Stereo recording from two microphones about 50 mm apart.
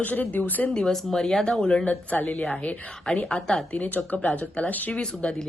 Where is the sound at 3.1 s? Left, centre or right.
Centre.